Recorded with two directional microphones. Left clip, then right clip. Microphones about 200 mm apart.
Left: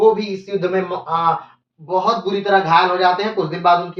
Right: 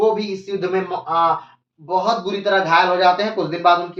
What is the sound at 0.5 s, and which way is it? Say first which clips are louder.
Speech: left 2 dB; 15° right (ahead or behind).